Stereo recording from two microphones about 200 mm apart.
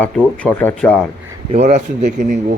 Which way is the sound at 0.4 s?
5° left (ahead or behind).